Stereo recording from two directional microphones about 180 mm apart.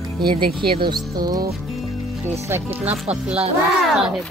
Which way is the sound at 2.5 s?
10° right (ahead or behind).